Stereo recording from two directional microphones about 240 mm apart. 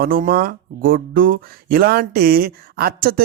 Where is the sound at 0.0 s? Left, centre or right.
Right.